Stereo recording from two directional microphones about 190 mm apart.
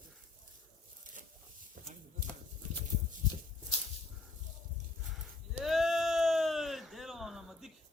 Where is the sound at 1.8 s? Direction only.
45° right (ahead or behind).